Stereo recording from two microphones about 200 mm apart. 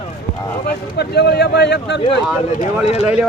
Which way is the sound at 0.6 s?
50° left (ahead or behind).